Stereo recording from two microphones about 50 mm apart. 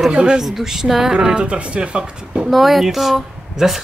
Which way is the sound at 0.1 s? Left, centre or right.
Centre.